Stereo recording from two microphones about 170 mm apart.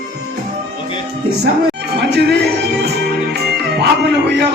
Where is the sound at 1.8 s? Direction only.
75° right (ahead or behind).